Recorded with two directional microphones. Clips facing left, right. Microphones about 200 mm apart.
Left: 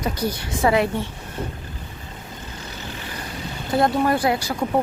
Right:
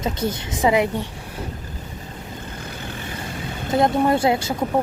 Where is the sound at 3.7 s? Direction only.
20° right (ahead or behind).